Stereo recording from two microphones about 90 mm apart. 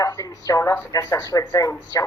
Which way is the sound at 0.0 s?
40° left (ahead or behind).